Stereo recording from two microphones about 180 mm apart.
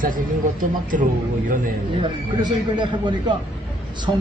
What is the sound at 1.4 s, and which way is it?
Speech, 50° right (ahead or behind).